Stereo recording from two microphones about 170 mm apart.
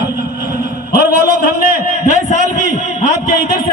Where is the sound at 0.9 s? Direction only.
60° left (ahead or behind).